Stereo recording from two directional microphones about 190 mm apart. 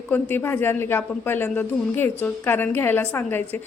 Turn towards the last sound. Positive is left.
turn(degrees=10)  # may be behind; listen again after turning